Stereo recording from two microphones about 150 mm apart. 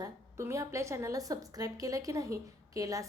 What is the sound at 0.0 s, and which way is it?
A woman's voice, 20° right (ahead or behind).